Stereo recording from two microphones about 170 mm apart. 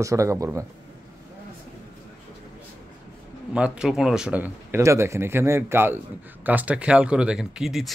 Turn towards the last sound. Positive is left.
turn(degrees=0)  # may be behind; listen again after turning